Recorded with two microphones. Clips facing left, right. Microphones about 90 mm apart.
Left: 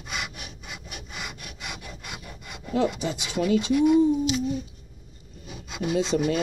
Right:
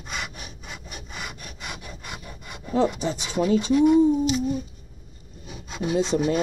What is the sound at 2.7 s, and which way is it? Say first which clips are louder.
Speech: right 2 dB; 30° right (ahead or behind).